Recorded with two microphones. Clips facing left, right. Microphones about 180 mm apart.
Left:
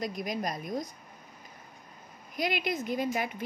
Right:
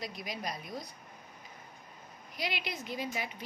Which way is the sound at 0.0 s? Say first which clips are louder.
Left 7 dB; 45° left (ahead or behind).